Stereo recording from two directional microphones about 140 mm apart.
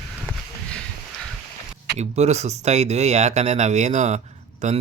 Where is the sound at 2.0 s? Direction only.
50° right (ahead or behind).